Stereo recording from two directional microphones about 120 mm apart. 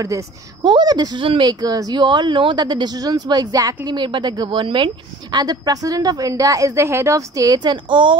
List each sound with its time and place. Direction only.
0.7 s speech: 35° right (ahead or behind)